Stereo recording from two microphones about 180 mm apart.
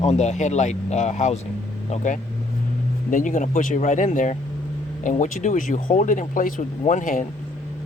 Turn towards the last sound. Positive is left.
turn(degrees=45)  # may be behind; listen again after turning